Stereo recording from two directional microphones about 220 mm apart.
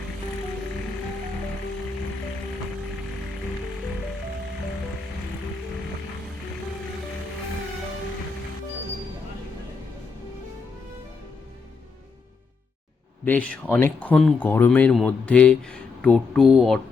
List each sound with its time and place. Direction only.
13.2 s speech: 5° left (ahead or behind)